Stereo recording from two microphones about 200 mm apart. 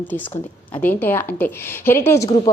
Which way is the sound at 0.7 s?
10° left (ahead or behind).